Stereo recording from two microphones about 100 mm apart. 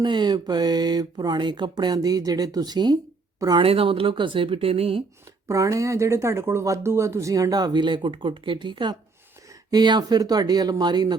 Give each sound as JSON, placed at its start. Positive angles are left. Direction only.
{"t": 0.0, "sound": "speech", "side_deg": -50}
{"t": 3.6, "sound": "speech", "side_deg": -65}
{"t": 5.5, "sound": "speech", "side_deg": -30}